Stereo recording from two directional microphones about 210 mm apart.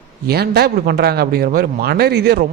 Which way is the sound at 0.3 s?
50° right (ahead or behind).